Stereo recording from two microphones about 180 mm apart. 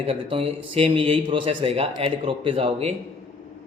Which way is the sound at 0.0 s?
30° right (ahead or behind).